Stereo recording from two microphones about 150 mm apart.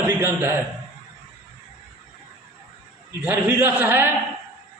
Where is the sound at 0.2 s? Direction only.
15° right (ahead or behind).